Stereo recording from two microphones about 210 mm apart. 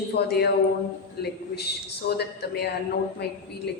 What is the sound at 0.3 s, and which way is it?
A man's voice, 50° left (ahead or behind).